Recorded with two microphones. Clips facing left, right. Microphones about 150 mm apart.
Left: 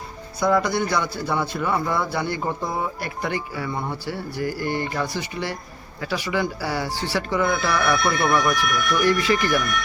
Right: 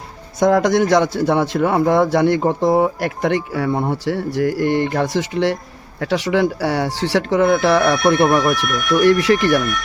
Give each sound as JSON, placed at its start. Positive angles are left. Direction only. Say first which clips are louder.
{"t": 0.3, "sound": "a man's voice", "louder": "right 7 dB", "side_deg": -90}
{"t": 3.9, "sound": "a man's voice", "louder": "right 9 dB", "side_deg": -90}